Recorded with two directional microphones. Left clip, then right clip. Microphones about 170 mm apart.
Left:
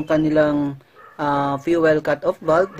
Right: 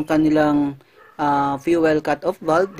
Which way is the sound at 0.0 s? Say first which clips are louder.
Even; 45° right (ahead or behind).